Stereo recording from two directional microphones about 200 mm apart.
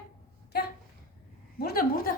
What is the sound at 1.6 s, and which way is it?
Speech, 50° left (ahead or behind).